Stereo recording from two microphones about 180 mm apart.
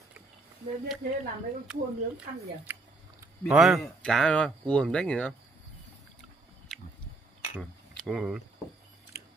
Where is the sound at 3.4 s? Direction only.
5° right (ahead or behind).